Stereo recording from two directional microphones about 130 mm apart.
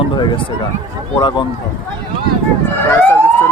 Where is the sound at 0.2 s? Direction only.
35° left (ahead or behind).